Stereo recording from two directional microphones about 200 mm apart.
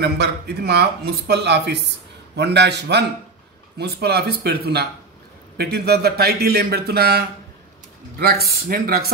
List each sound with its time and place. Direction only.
0.0 s speech: 55° right (ahead or behind)